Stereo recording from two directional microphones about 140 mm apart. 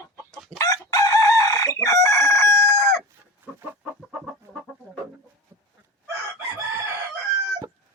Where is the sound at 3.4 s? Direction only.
15° right (ahead or behind).